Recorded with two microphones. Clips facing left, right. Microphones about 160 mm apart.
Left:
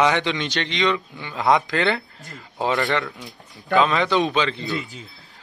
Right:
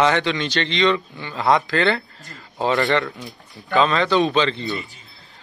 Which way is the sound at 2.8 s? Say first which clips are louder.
Right 3 dB; centre (ahead or behind).